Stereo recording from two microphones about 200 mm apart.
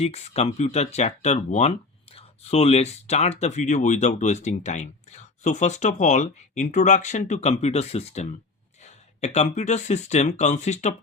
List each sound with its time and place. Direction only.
0.0 s speech: 30° left (ahead or behind)